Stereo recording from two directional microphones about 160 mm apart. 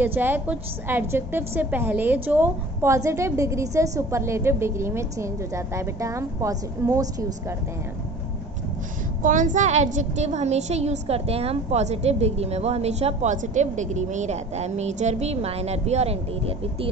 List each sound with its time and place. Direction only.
0.0 s a woman's voice: 10° right (ahead or behind)
9.2 s a woman's voice: 55° right (ahead or behind)